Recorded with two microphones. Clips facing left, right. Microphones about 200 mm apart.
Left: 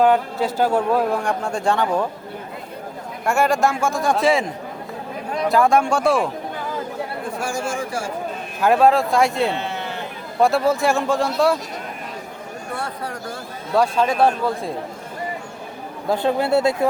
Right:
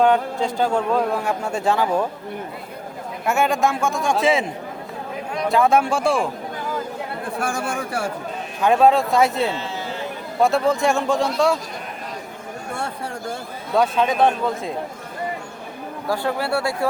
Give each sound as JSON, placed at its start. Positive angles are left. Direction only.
{"t": 0.0, "sound": "a man's voice", "side_deg": 5}
{"t": 1.2, "sound": "a man's voice", "side_deg": -5}
{"t": 3.2, "sound": "a man's voice", "side_deg": 0}
{"t": 5.5, "sound": "a man's voice", "side_deg": 0}
{"t": 7.3, "sound": "speech", "side_deg": -60}
{"t": 8.6, "sound": "a man's voice", "side_deg": 0}
{"t": 9.5, "sound": "sheep", "side_deg": 60}
{"t": 10.4, "sound": "a man's voice", "side_deg": 0}
{"t": 13.7, "sound": "a man's voice", "side_deg": 0}
{"t": 16.0, "sound": "a man's voice", "side_deg": 20}